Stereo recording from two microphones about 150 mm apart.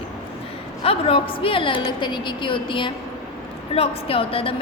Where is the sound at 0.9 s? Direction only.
40° left (ahead or behind).